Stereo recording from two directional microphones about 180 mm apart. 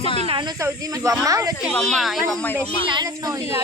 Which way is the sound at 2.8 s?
25° right (ahead or behind).